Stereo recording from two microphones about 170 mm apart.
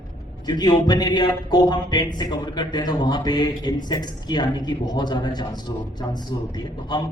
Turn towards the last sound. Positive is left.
turn(degrees=25)  # may be behind; listen again after turning